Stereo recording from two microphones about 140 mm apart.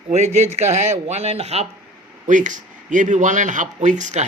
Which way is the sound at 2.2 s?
65° right (ahead or behind).